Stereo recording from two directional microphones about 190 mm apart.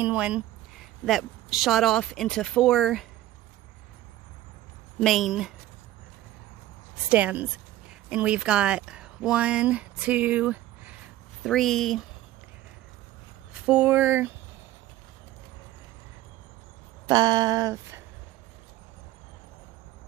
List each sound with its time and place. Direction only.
0.0 s speech: 5° right (ahead or behind)
5.0 s speech: centre (ahead or behind)
7.1 s a woman's voice: 10° right (ahead or behind)
13.5 s speech: 5° right (ahead or behind)
17.0 s a sound: 20° right (ahead or behind)